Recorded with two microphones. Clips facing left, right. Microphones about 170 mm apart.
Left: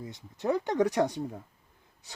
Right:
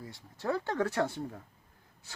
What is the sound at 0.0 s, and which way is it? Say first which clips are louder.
Speech: left 4 dB; 20° left (ahead or behind).